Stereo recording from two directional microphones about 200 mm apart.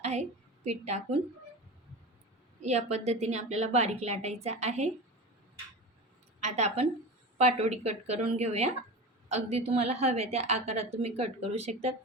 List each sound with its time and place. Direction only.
0.0 s a woman's voice: 35° right (ahead or behind)
2.6 s a woman's voice: 35° right (ahead or behind)
6.4 s a woman's voice: 35° right (ahead or behind)